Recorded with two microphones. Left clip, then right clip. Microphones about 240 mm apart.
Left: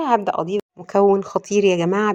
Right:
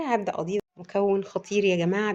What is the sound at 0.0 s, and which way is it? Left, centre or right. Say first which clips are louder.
Speech: left 8 dB; centre.